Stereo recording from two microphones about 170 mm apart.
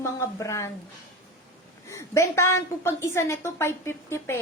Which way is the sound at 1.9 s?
15° left (ahead or behind).